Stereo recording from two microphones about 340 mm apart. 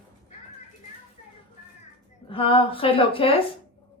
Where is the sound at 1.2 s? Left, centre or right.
Left.